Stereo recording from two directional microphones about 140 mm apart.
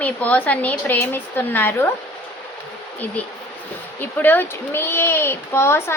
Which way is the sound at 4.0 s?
15° left (ahead or behind).